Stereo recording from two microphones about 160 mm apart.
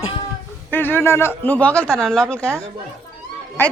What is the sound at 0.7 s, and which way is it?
A man's voice, 10° left (ahead or behind).